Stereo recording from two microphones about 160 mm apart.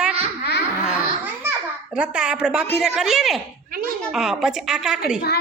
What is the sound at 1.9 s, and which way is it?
Speech, 5° right (ahead or behind).